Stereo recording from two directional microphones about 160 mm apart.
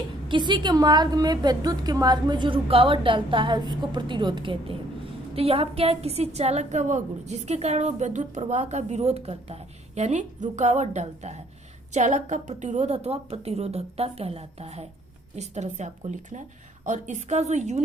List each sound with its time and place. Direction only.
0.3 s a woman's voice: 30° right (ahead or behind); by 17.8 s 45° right (ahead or behind)